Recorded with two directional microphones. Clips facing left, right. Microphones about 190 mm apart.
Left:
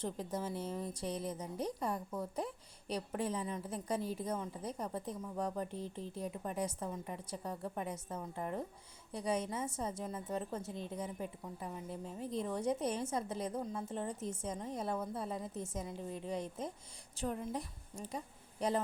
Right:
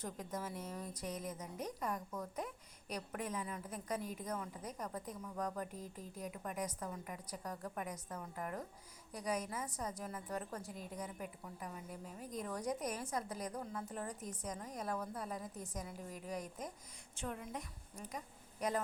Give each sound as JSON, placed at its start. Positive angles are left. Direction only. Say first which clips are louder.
{"t": 0.0, "sound": "a woman's voice", "louder": "left 5 dB", "side_deg": 30}